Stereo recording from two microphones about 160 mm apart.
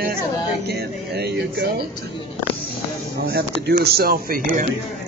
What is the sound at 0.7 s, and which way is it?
Speech, 90° right.